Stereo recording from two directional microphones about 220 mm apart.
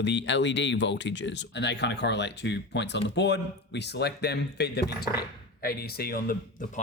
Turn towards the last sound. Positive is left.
turn(degrees=45)  # may be behind; listen again after turning